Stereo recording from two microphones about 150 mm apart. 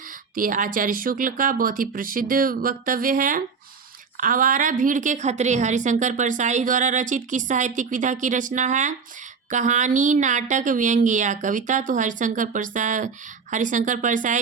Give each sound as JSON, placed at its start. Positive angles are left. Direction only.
{"t": 0.3, "sound": "a woman's voice", "side_deg": -65}